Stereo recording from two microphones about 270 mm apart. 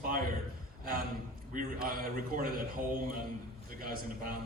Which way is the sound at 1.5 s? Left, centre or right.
Right.